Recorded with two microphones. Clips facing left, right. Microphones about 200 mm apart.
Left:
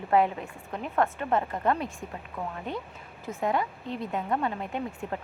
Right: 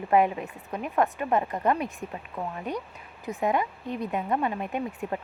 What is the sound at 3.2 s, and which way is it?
Speech, 20° right (ahead or behind).